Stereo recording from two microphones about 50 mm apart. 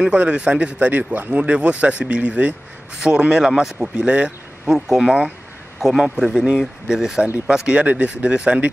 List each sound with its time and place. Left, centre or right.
0.0 s speech: right
1.4 s speech: right
4.6 s a man's voice: centre
7.7 s speech: right